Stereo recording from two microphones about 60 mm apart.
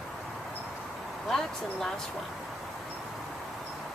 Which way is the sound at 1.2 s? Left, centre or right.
Centre.